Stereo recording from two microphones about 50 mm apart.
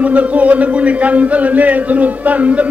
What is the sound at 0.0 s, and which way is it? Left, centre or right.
Speech, right.